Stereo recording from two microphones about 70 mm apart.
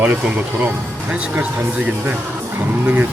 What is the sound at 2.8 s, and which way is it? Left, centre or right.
Speech, centre.